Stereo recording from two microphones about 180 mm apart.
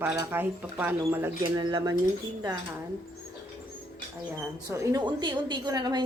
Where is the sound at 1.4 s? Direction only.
25° right (ahead or behind).